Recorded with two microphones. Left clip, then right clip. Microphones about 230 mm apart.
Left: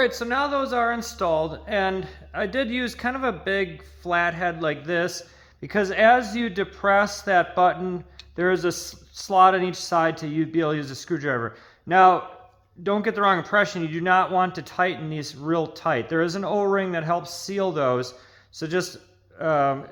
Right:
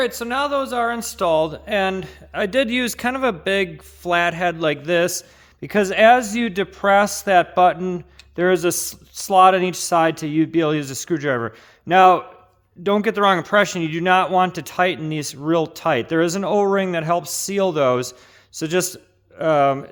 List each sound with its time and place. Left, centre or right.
0.2 s a man's voice: right